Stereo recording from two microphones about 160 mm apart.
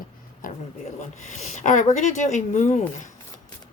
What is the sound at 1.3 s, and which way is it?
Speech, 45° left (ahead or behind).